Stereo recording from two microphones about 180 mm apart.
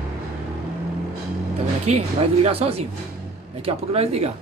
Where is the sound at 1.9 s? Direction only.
35° right (ahead or behind).